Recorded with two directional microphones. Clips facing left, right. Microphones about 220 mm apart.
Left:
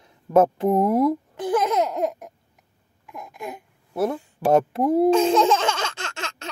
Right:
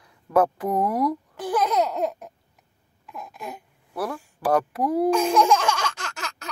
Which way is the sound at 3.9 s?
25° left (ahead or behind).